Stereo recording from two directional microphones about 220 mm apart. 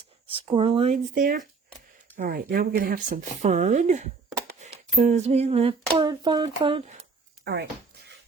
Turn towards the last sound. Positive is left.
turn(degrees=-50)  # may be behind; listen again after turning